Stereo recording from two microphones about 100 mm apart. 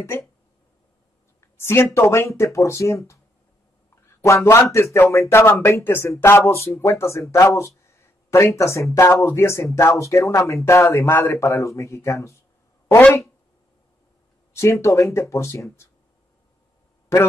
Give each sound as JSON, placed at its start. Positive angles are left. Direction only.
{"t": 1.6, "sound": "speech", "side_deg": 25}
{"t": 4.2, "sound": "speech", "side_deg": 30}
{"t": 14.5, "sound": "speech", "side_deg": 30}